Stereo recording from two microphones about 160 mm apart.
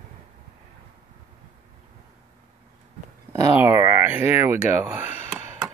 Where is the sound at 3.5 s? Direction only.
15° right (ahead or behind).